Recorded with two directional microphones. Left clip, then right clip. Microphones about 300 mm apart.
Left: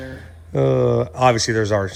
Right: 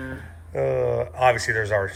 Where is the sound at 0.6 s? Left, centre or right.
Left.